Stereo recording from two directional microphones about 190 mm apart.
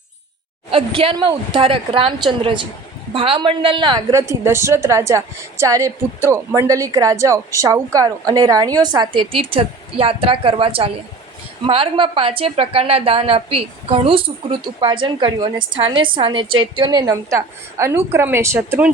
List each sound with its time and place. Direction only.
0.7 s a woman's voice: 30° right (ahead or behind); by 18.9 s 10° right (ahead or behind)